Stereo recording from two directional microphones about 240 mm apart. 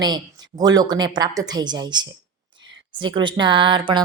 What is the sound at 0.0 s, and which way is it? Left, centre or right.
A woman's voice, centre.